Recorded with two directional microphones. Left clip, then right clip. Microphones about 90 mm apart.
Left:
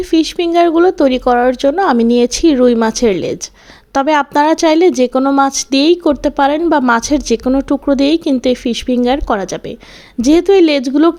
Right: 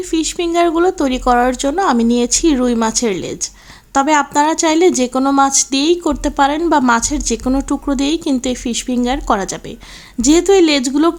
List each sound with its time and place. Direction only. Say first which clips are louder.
0.0 s a woman's voice: left 4 dB; 40° left (ahead or behind)
7.5 s speech: left 4 dB; 30° left (ahead or behind)